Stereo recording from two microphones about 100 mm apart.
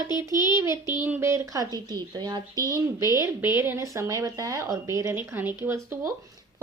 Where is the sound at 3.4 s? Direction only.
20° right (ahead or behind).